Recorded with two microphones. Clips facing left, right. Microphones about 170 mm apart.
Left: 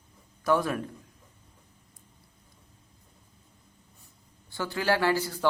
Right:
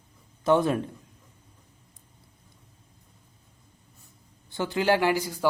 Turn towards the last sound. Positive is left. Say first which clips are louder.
# right 2 dB
turn(degrees=-15)  # may be behind; listen again after turning